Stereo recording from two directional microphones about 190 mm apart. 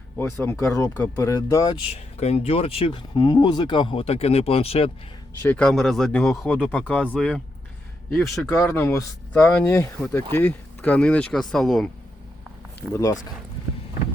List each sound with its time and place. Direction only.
0.2 s speech: 15° left (ahead or behind)
1.9 s speech: 35° left (ahead or behind)
5.4 s speech: 10° left (ahead or behind)
8.1 s speech: 15° left (ahead or behind)
12.9 s speech: 15° left (ahead or behind)